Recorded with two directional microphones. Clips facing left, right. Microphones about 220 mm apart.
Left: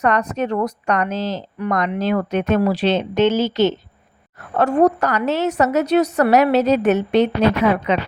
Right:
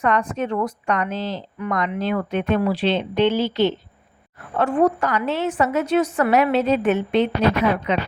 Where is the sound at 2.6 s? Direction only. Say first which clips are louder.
Left 3 dB; 45° left (ahead or behind).